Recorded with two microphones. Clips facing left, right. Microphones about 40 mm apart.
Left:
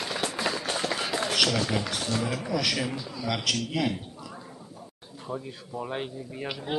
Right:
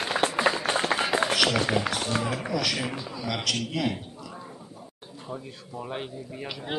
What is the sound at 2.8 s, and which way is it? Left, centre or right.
Speech, right.